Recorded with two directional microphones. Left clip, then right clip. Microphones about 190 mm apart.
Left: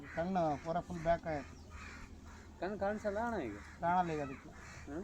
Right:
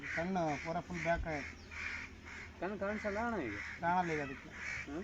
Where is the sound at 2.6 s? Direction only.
40° right (ahead or behind).